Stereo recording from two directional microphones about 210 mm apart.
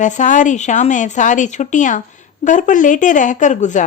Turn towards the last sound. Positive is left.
turn(degrees=35)  # may be behind; listen again after turning